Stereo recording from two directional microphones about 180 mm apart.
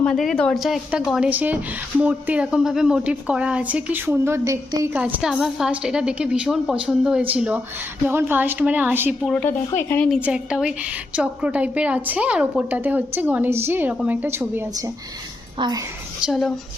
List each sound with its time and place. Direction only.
0.0 s a woman's voice: 5° left (ahead or behind); by 4.6 s 15° right (ahead or behind)
4.9 s a woman's voice: 5° right (ahead or behind)
9.9 s a woman's voice: 5° left (ahead or behind)
10.2 s a woman's voice: 5° right (ahead or behind)
15.5 s speech: 25° right (ahead or behind)
16.2 s a woman's voice: centre (ahead or behind)